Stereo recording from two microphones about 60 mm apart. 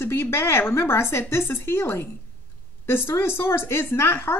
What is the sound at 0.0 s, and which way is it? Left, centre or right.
Speech, left.